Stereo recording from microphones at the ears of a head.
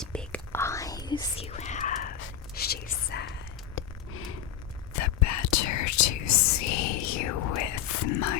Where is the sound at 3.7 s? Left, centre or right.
Left.